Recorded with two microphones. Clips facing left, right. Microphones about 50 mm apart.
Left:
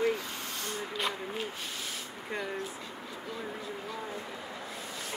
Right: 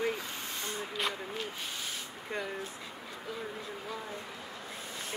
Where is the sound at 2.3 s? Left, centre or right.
Centre.